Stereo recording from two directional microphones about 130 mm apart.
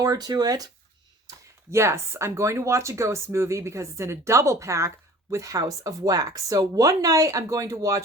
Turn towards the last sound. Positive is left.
turn(degrees=-25)  # may be behind; listen again after turning